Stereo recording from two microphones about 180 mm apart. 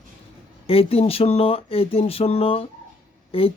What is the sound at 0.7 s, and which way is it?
Speech, 30° left (ahead or behind).